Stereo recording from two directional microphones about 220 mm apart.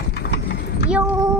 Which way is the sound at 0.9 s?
10° right (ahead or behind).